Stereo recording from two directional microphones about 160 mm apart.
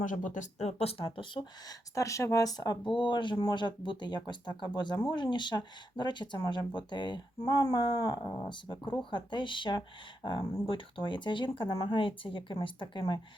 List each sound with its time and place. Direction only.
0.0 s speech: 55° left (ahead or behind); by 1.7 s 30° left (ahead or behind)
2.0 s speech: 20° left (ahead or behind)